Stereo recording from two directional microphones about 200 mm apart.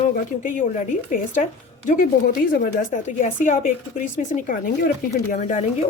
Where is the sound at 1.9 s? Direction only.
45° left (ahead or behind).